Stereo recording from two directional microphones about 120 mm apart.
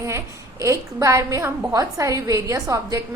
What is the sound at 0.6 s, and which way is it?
A woman's voice, 25° right (ahead or behind).